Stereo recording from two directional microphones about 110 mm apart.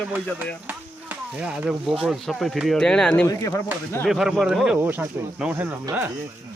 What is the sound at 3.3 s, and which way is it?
Speech, 30° left (ahead or behind).